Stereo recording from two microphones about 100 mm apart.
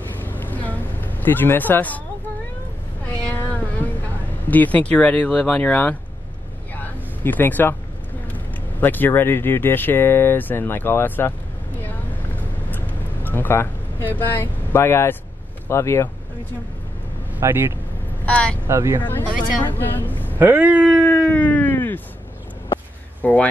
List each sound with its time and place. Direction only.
0.2 s vehicle: 20° left (ahead or behind)
3.1 s cat: 15° left (ahead or behind)
4.5 s speech: 15° left (ahead or behind)
6.7 s a sound: 20° left (ahead or behind)
8.8 s speech: 20° left (ahead or behind)
12.4 s vehicle: 20° left (ahead or behind)
15.7 s speech: 25° left (ahead or behind)
17.4 s speech: 25° right (ahead or behind)
18.2 s speech: 10° left (ahead or behind)
18.7 s speech: 25° right (ahead or behind)
19.0 s speech: 20° left (ahead or behind)
20.3 s speech: 15° right (ahead or behind)
21.0 s a sound: 15° left (ahead or behind)
23.2 s speech: 15° left (ahead or behind)